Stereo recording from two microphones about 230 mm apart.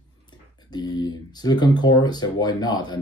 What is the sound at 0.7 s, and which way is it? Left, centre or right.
Speech, centre.